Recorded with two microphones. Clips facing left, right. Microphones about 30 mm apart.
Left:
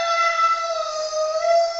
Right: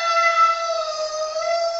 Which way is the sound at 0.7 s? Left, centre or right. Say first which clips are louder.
Right 1 dB; right.